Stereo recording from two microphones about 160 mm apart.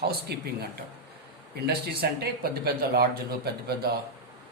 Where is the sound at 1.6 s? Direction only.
80° right.